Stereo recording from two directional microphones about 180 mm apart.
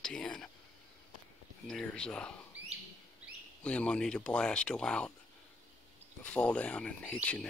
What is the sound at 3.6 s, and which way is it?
Speech, 5° left (ahead or behind).